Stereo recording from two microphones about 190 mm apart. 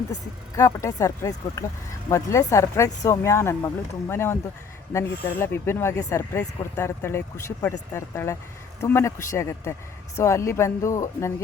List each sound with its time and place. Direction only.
0.1 s speech: 15° left (ahead or behind)